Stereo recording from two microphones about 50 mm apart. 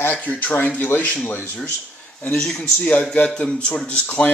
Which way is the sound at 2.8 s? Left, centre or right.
Left.